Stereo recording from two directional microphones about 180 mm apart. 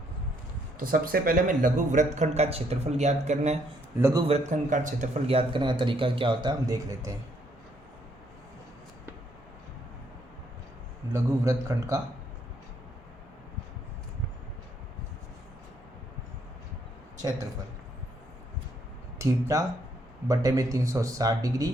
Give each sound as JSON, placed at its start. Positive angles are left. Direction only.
{"t": 0.8, "sound": "a man's voice", "side_deg": -50}
{"t": 11.1, "sound": "a man's voice", "side_deg": -15}
{"t": 19.2, "sound": "a man's voice", "side_deg": -15}